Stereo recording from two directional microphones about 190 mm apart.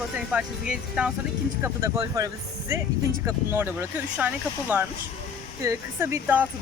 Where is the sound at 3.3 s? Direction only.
10° right (ahead or behind).